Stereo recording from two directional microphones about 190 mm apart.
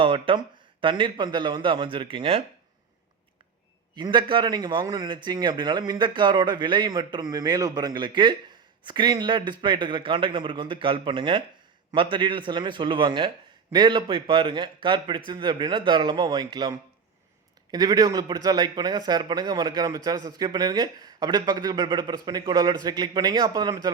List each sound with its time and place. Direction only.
0.0 s a man's voice: 25° right (ahead or behind)
3.9 s a man's voice: 25° right (ahead or behind)